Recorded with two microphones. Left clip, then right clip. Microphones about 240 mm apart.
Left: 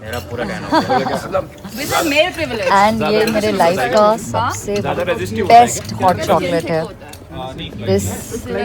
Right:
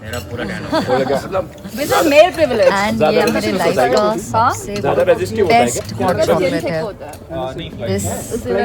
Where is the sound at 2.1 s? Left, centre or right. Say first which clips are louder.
Right 6 dB; right.